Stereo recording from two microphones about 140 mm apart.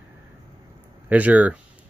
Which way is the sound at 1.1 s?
10° right (ahead or behind).